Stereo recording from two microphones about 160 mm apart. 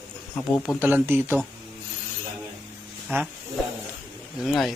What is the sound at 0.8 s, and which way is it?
Speech, 10° right (ahead or behind).